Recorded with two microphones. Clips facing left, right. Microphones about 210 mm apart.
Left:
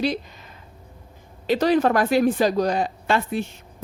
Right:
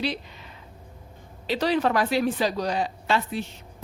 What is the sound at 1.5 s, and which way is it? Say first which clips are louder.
A woman's voice: left 5 dB; 45° left (ahead or behind).